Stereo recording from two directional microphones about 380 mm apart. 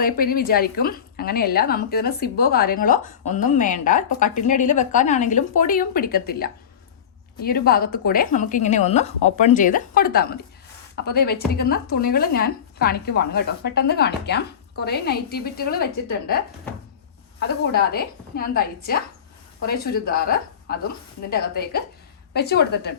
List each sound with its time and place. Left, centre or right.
0.0 s a woman's voice: left
17.6 s a woman's voice: left